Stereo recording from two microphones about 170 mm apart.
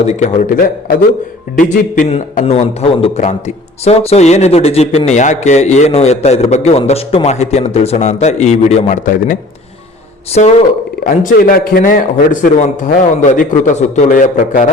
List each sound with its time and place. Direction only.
0.0 s a man's voice: 40° left (ahead or behind)
11.0 s a man's voice: 55° left (ahead or behind)